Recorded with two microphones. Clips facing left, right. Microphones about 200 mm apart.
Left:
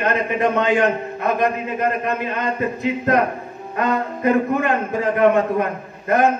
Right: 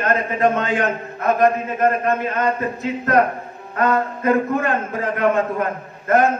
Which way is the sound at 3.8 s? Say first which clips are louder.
Right 1 dB; 20° left (ahead or behind).